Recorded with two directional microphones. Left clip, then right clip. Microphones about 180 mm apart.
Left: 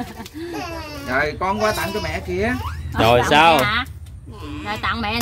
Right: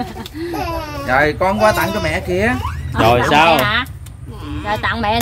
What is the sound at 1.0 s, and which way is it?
Speech, 60° right (ahead or behind).